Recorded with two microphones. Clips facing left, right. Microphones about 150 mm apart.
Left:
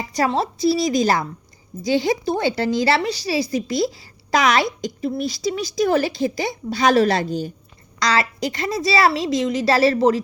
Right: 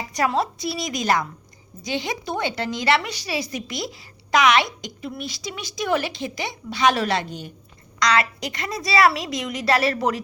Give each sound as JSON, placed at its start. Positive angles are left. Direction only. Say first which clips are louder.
{"t": 0.1, "sound": "a woman's voice", "louder": "left 2 dB", "side_deg": 30}